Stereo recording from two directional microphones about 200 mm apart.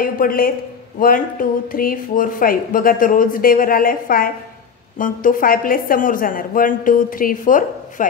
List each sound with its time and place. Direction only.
0.0 s speech: 45° left (ahead or behind)